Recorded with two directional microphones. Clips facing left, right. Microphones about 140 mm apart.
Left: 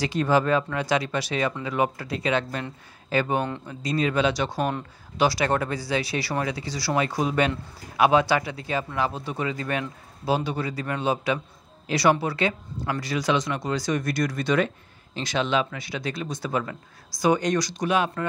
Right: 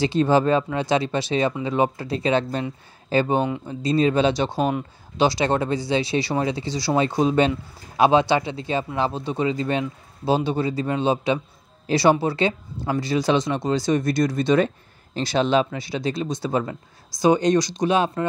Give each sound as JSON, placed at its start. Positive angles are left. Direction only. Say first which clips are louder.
{"t": 0.0, "sound": "speech", "louder": "right 4 dB", "side_deg": -25}
{"t": 4.6, "sound": "speech", "louder": "right 4 dB", "side_deg": -10}
{"t": 5.1, "sound": "speech", "louder": "right 2 dB", "side_deg": -25}